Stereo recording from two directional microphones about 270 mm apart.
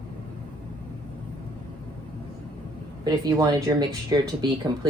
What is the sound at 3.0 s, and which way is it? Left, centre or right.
Speech, centre.